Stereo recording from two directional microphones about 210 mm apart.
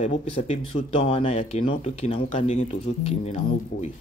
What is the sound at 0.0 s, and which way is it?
Speech, 30° left (ahead or behind).